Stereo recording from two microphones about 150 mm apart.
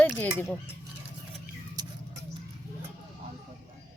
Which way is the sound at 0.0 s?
10° left (ahead or behind).